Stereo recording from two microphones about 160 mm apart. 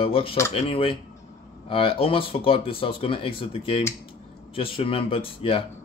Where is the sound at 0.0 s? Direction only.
35° left (ahead or behind).